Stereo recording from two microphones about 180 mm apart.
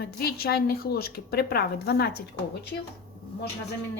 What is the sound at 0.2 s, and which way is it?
A woman's voice, 55° left (ahead or behind).